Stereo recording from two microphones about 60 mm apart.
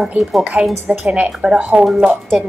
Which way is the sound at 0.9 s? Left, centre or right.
Centre.